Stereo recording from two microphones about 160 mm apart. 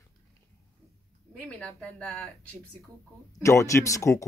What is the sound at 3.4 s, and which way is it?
Speech, 20° left (ahead or behind).